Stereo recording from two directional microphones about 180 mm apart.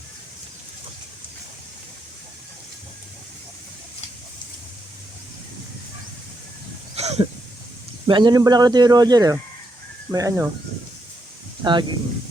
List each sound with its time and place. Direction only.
6.9 s a sound: 35° right (ahead or behind)
8.0 s speech: 25° right (ahead or behind)
11.6 s speech: 25° right (ahead or behind)